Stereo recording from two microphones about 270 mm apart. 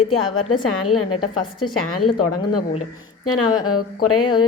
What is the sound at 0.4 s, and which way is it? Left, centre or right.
Speech, left.